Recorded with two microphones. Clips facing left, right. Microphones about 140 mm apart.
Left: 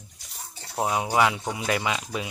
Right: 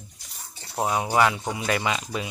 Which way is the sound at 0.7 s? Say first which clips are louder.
Right 1 dB; 5° left (ahead or behind).